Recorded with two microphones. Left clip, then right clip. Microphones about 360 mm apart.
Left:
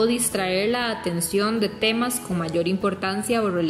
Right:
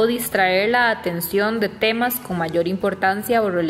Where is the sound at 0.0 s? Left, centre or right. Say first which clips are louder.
Right 5 dB; centre.